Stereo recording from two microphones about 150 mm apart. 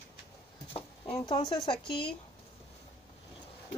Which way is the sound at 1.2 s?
30° left (ahead or behind).